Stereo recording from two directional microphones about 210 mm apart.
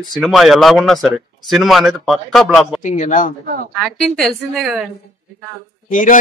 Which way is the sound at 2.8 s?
35° left (ahead or behind).